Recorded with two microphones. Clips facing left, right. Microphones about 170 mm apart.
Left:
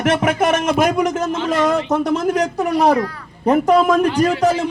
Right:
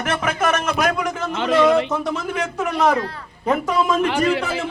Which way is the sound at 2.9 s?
30° right (ahead or behind).